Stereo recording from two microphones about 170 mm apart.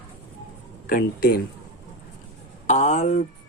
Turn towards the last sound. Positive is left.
turn(degrees=45)  # may be behind; listen again after turning